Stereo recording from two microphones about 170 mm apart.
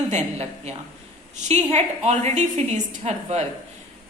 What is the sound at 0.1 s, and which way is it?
A woman's voice, 40° right (ahead or behind).